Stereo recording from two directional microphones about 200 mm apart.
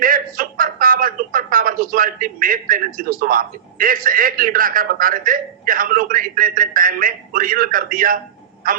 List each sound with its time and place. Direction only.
0.0 s a man's voice: 45° right (ahead or behind)